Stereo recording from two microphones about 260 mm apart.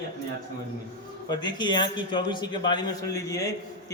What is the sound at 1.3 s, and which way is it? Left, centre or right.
A man's voice, centre.